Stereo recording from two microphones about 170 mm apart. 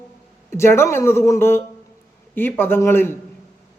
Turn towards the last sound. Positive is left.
turn(degrees=15)  # may be behind; listen again after turning